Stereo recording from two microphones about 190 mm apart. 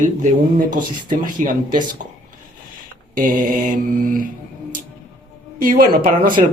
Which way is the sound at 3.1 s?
45° right (ahead or behind).